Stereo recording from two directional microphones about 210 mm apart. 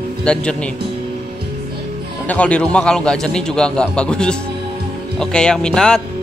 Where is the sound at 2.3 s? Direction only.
5° left (ahead or behind).